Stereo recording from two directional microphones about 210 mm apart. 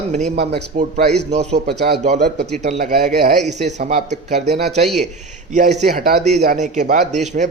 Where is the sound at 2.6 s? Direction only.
35° right (ahead or behind).